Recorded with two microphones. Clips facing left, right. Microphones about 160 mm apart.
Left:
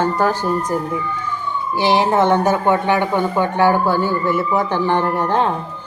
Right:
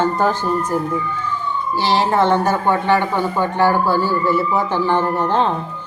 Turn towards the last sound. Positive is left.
turn(degrees=10)  # may be behind; listen again after turning